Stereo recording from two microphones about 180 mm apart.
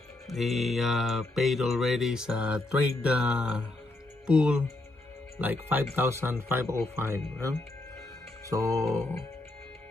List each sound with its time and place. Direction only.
0.3 s mantra: centre (ahead or behind)
5.4 s speech: 10° right (ahead or behind)